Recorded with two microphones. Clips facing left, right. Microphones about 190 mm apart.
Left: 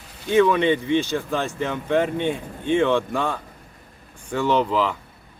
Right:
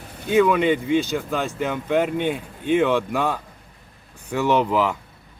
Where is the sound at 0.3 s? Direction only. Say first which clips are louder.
Even; 5° right (ahead or behind).